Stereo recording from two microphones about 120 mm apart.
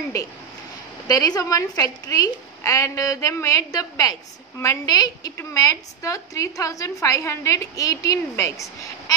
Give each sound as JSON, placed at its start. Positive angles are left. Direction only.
{"t": 0.2, "sound": "a woman's voice", "side_deg": 30}